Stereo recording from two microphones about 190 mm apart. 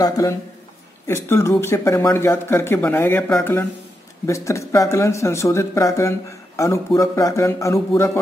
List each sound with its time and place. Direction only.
0.0 s a man's voice: 20° left (ahead or behind)